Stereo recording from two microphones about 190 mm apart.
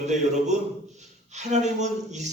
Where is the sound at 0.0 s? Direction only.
40° right (ahead or behind).